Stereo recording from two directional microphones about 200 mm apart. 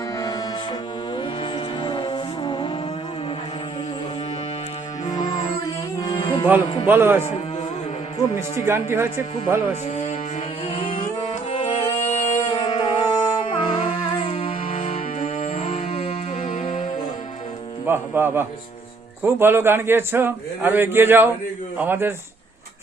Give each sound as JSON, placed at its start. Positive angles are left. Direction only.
{"t": 0.2, "sound": "music", "side_deg": 20}
{"t": 6.1, "sound": "music", "side_deg": 20}
{"t": 6.8, "sound": "a man's voice", "side_deg": -10}
{"t": 8.6, "sound": "a man's voice", "side_deg": -10}
{"t": 9.9, "sound": "music", "side_deg": 35}
{"t": 17.8, "sound": "a man's voice", "side_deg": -10}